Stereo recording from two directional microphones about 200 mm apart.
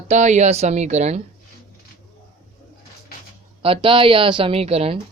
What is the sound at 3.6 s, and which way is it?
A woman's voice, 25° right (ahead or behind).